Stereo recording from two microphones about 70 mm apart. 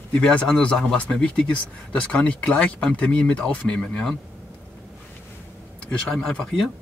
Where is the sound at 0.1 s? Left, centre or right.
Centre.